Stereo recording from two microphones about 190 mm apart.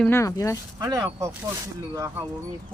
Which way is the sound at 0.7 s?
20° right (ahead or behind).